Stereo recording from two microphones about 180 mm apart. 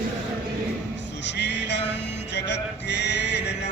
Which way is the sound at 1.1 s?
75° left (ahead or behind).